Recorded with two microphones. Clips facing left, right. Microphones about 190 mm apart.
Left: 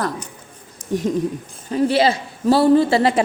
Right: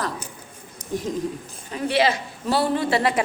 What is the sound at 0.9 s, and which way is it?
Speech, 70° left (ahead or behind).